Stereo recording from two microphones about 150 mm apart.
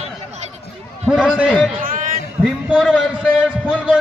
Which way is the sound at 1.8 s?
65° right (ahead or behind).